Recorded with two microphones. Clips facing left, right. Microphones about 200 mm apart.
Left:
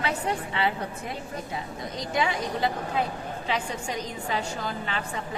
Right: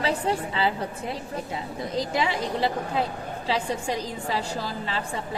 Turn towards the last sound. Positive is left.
turn(degrees=-35)  # may be behind; listen again after turning